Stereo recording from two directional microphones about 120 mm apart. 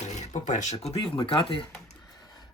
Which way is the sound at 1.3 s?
45° left (ahead or behind).